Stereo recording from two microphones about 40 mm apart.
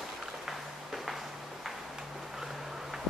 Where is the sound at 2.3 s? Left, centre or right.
Centre.